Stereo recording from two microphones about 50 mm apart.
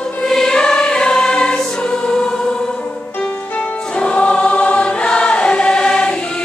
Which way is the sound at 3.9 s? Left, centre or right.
Left.